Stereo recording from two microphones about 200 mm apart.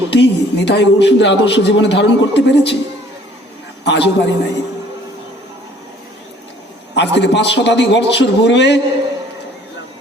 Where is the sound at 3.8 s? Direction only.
60° left (ahead or behind).